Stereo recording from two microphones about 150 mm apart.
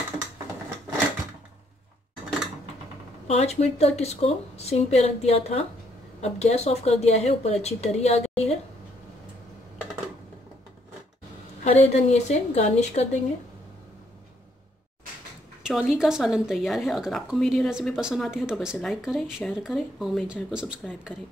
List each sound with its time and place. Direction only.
3.3 s a woman's voice: 45° left (ahead or behind)
11.6 s a woman's voice: 45° left (ahead or behind)
15.6 s speech: 5° right (ahead or behind)